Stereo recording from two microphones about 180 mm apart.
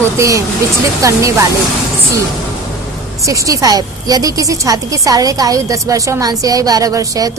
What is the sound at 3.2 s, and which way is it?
A woman's voice, 15° right (ahead or behind).